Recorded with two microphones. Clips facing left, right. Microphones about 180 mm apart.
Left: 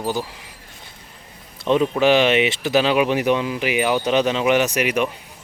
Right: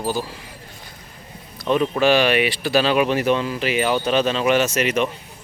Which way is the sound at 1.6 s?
20° left (ahead or behind).